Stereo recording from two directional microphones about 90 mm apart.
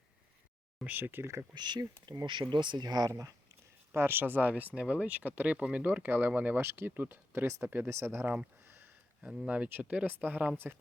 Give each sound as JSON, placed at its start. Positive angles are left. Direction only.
{"t": 0.9, "sound": "speech", "side_deg": -20}
{"t": 1.5, "sound": "speech", "side_deg": -55}
{"t": 1.8, "sound": "speech", "side_deg": -40}
{"t": 2.4, "sound": "speech", "side_deg": -60}
{"t": 3.1, "sound": "speech", "side_deg": -35}
{"t": 3.9, "sound": "speech", "side_deg": -25}
{"t": 8.6, "sound": "a sound", "side_deg": -25}
{"t": 9.2, "sound": "speech", "side_deg": -10}